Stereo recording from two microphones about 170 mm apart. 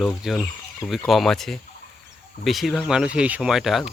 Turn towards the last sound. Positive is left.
turn(degrees=0)  # may be behind; listen again after turning